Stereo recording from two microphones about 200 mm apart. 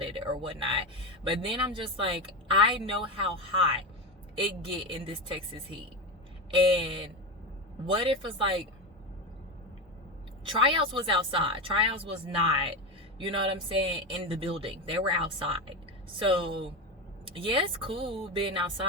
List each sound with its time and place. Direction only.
0.0 s speech: 25° right (ahead or behind)
6.5 s speech: 25° right (ahead or behind)
10.5 s speech: 25° right (ahead or behind)